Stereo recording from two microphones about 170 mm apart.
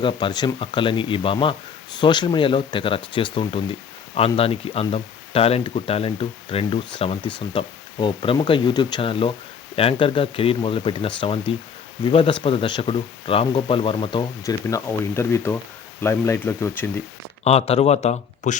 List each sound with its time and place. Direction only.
0.0 s speech: 25° left (ahead or behind)
17.4 s speech: 40° left (ahead or behind)